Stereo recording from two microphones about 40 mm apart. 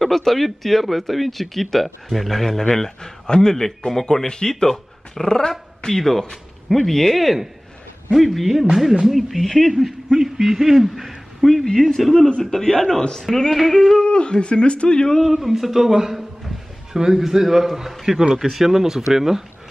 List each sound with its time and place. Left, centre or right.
0.0 s speech: centre
10.1 s speech: centre
11.7 s speech: centre
13.5 s speech: centre
14.0 s speech: left
15.2 s speech: centre
16.2 s a sound: centre
17.0 s speech: centre